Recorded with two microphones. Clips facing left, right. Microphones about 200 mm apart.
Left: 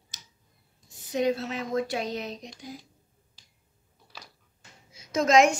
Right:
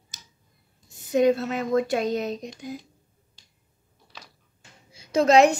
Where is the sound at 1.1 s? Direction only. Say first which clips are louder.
Right 6 dB; 50° right (ahead or behind).